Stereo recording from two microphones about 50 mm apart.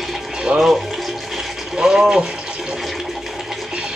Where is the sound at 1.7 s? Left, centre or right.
Centre.